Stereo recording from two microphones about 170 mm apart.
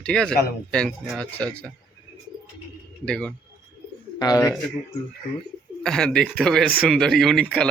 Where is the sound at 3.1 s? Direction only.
5° left (ahead or behind).